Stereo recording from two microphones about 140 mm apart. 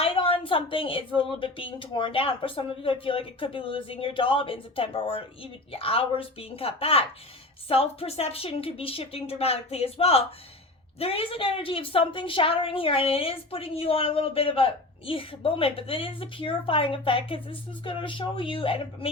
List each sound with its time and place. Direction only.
0.0 s a woman's voice: 40° left (ahead or behind)